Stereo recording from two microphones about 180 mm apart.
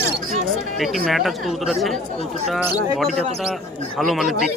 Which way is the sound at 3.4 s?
Centre (ahead or behind).